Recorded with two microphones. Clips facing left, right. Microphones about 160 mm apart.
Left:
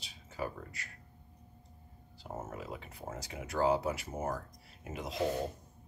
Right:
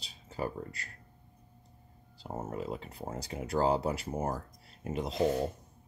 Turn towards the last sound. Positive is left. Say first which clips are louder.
# right 6 dB
turn(degrees=-35)  # may be behind; listen again after turning